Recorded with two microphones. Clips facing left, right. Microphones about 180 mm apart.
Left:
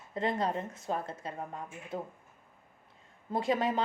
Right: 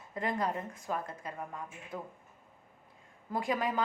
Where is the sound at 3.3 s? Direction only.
25° left (ahead or behind).